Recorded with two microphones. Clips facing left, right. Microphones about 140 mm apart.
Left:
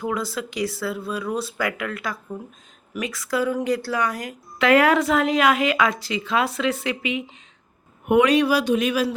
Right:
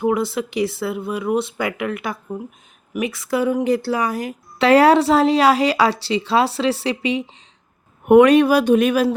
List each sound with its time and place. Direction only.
0.0 s speech: 25° right (ahead or behind)
8.0 s speech: 50° right (ahead or behind)